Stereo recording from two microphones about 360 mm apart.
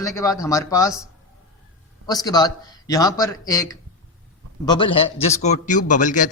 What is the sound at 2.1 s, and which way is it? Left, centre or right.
A man's voice, centre.